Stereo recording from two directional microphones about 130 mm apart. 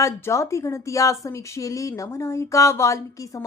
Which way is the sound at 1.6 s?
25° left (ahead or behind).